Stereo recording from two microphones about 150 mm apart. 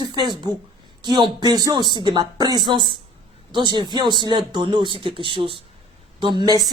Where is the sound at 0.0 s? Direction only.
30° right (ahead or behind).